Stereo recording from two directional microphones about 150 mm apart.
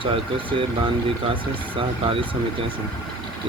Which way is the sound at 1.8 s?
35° right (ahead or behind).